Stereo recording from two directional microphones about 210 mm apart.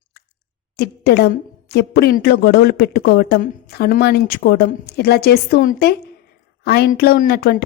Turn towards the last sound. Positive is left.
turn(degrees=50)  # may be behind; listen again after turning